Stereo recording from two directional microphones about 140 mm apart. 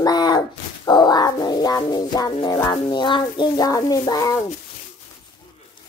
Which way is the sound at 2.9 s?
35° left (ahead or behind).